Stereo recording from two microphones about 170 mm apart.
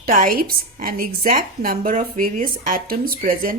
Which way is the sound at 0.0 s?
55° right (ahead or behind).